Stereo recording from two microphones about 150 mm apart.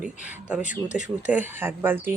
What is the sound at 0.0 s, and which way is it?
Speech, 10° right (ahead or behind).